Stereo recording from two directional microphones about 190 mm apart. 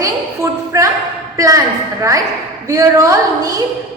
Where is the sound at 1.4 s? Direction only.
15° right (ahead or behind).